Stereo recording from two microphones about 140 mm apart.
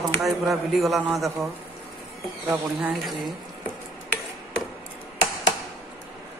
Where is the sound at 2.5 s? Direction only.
10° right (ahead or behind).